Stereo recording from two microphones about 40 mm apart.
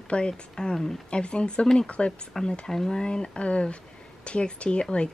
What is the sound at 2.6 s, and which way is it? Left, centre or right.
Speech, centre.